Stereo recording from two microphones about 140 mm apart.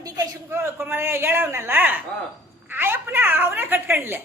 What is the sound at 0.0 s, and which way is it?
A man's voice, 20° right (ahead or behind).